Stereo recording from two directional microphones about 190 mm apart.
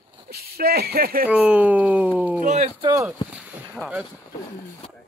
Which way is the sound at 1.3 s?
5° right (ahead or behind).